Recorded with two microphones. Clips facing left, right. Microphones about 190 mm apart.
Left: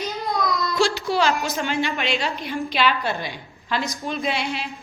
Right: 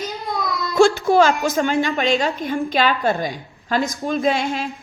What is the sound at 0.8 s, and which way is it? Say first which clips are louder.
A woman's voice: right 9 dB; 50° right (ahead or behind).